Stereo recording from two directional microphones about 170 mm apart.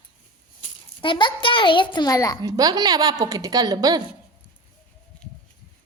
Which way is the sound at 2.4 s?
20° right (ahead or behind).